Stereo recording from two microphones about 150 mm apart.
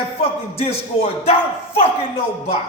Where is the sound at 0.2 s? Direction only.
40° left (ahead or behind).